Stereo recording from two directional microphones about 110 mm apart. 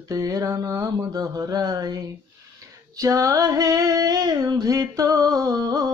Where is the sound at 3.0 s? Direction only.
30° right (ahead or behind).